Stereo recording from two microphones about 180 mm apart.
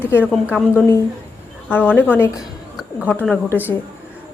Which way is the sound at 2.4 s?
Centre (ahead or behind).